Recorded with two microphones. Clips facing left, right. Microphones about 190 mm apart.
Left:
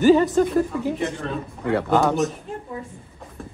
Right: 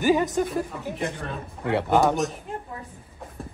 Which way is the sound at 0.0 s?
15° right (ahead or behind).